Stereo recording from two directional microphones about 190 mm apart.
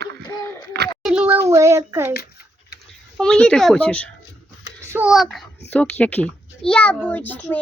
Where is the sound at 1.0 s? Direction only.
5° right (ahead or behind).